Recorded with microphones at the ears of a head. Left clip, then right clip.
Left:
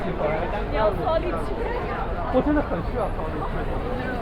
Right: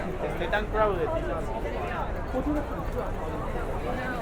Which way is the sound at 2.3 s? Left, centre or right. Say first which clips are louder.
Left 10 dB; left.